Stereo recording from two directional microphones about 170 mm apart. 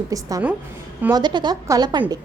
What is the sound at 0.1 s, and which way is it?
A woman's voice, 20° right (ahead or behind).